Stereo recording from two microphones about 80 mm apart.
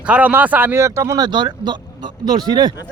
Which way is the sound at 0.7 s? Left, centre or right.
Right.